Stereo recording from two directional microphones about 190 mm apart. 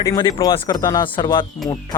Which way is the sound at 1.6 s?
Centre (ahead or behind).